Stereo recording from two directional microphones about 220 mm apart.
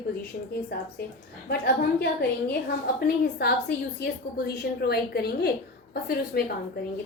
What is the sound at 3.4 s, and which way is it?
A woman's voice, 45° left (ahead or behind).